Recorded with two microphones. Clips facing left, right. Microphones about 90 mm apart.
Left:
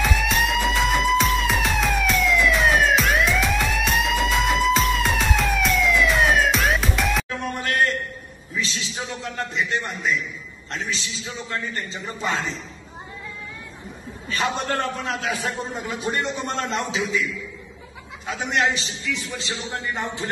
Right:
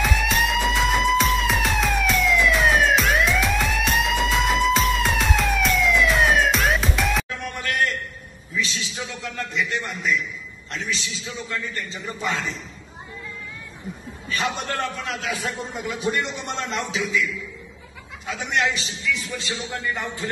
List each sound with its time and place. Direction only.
0.0 s music: centre (ahead or behind)
7.2 s music: 35° left (ahead or behind)
8.5 s a sound: 35° left (ahead or behind)
10.7 s a man's voice: 35° left (ahead or behind)
14.2 s a man's voice: 35° left (ahead or behind)